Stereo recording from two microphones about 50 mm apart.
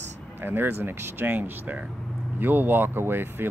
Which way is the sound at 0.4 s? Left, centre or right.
Right.